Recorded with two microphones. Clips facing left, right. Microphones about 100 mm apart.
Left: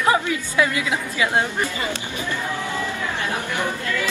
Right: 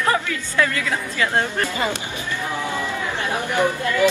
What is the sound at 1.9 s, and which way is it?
Speech, 15° right (ahead or behind).